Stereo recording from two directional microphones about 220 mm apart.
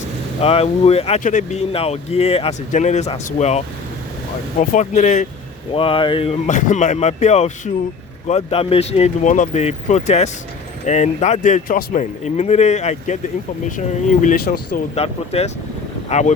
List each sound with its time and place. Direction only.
0.4 s speech: 25° left (ahead or behind)
4.6 s a man's voice: 35° left (ahead or behind)
14.9 s speech: 30° left (ahead or behind)